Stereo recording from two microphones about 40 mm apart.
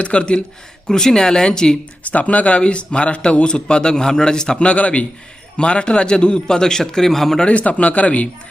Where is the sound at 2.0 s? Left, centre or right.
Left; by 4.7 s centre.